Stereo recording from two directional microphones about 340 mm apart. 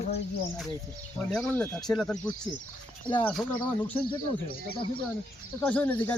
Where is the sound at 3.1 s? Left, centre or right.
Centre.